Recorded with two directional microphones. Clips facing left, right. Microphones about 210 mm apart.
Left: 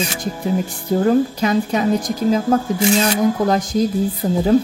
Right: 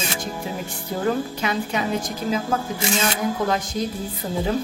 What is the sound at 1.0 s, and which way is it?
Speech, 40° left (ahead or behind).